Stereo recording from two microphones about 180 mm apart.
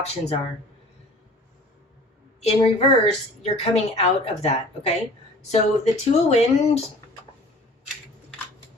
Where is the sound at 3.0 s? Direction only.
35° left (ahead or behind).